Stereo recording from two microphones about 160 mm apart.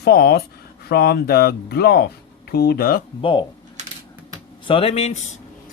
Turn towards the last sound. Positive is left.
turn(degrees=40)  # may be behind; listen again after turning